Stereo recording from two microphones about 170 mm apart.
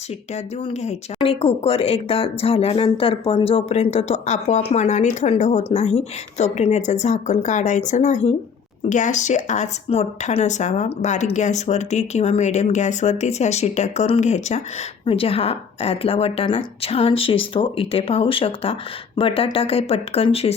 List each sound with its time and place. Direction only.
0.3 s a woman's voice: 40° left (ahead or behind)